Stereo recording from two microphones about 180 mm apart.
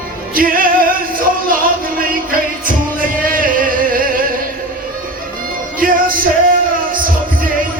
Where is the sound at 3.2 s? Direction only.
50° right (ahead or behind).